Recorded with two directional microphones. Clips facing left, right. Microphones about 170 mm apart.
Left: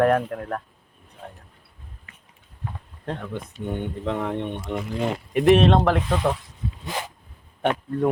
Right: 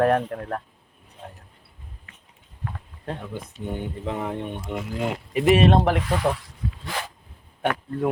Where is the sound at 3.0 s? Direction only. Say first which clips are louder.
Left 2 dB; 10° right (ahead or behind).